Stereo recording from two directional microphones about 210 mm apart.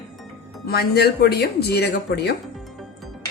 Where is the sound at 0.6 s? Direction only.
50° left (ahead or behind).